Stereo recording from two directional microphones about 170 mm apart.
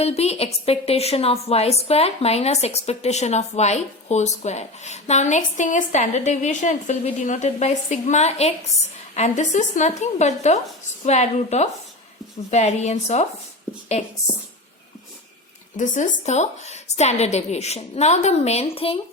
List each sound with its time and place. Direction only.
0.0 s a woman's voice: 40° left (ahead or behind)
15.8 s a woman's voice: 45° left (ahead or behind)